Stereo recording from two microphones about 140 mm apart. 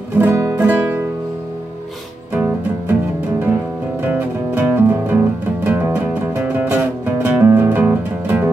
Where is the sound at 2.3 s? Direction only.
15° right (ahead or behind).